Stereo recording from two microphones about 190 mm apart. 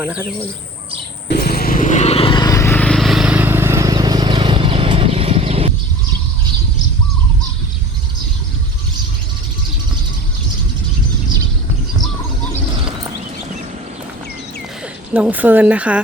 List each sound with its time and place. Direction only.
0.0 s speech: 10° right (ahead or behind)
1.3 s vehicle: 55° left (ahead or behind); by 5.7 s 30° right (ahead or behind)
15.1 s speech: 5° right (ahead or behind)